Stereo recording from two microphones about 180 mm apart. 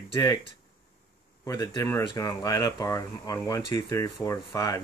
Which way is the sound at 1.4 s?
20° left (ahead or behind).